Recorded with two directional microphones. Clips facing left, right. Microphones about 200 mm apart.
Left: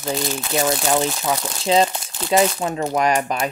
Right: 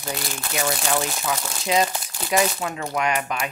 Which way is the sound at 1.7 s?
30° left (ahead or behind).